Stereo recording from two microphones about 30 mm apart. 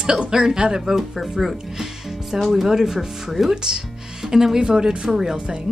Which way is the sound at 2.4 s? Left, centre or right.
Centre.